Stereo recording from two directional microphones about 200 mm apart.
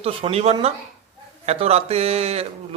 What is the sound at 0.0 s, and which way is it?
Speech, 30° right (ahead or behind).